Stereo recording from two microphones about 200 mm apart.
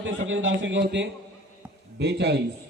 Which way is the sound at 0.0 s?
70° right (ahead or behind).